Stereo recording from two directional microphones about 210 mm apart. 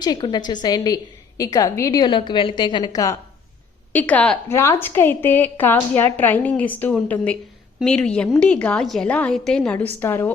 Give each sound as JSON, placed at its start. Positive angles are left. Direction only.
{"t": 0.0, "sound": "a woman's voice", "side_deg": 20}